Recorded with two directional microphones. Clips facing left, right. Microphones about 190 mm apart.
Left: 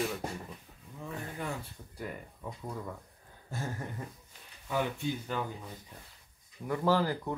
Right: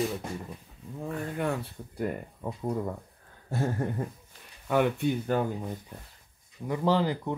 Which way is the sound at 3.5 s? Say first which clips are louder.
Right 9 dB; 55° right (ahead or behind).